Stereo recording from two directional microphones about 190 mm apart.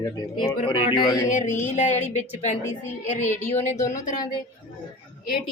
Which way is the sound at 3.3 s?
10° left (ahead or behind).